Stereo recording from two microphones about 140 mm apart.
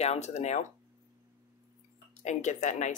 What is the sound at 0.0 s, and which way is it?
Speech, 50° left (ahead or behind).